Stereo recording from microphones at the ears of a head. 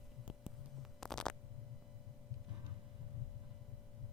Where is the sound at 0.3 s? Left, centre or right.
Left.